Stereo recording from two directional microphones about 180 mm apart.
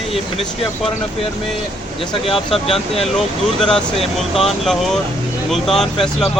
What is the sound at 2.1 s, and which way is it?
Speech, 30° left (ahead or behind).